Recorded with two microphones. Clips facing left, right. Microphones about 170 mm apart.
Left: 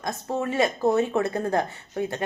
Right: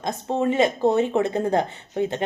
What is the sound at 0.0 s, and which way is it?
Speech, 20° right (ahead or behind).